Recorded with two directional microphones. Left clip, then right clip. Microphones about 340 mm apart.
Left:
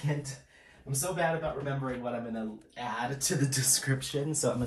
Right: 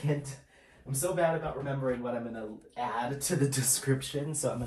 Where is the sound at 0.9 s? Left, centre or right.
Centre.